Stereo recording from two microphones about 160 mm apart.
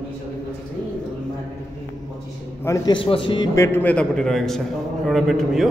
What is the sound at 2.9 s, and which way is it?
A man's voice, 35° left (ahead or behind).